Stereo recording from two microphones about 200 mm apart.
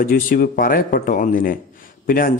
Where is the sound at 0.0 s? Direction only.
45° left (ahead or behind).